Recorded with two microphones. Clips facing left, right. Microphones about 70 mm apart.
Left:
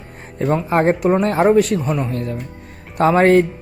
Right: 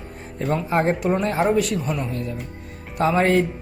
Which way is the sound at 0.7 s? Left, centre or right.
Left.